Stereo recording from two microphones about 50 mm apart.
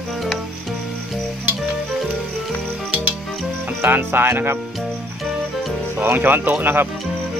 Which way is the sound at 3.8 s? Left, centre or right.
Right.